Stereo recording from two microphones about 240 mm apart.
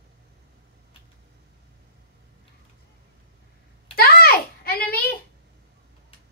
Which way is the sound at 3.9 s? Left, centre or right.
Left.